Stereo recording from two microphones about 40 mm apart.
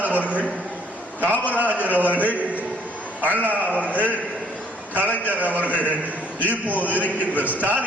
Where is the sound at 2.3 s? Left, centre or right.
Left.